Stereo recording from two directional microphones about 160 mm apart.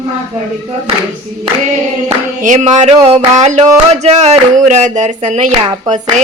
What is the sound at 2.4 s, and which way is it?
Speech, 50° right (ahead or behind).